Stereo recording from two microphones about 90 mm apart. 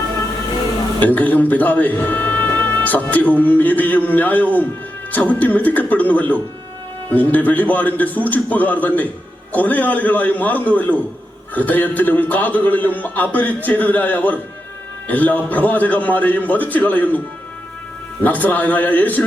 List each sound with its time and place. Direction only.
1.0 s a man's voice: 20° left (ahead or behind)
18.2 s speech: 20° left (ahead or behind)